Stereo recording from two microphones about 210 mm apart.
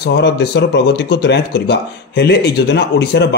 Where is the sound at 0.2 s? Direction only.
55° left (ahead or behind).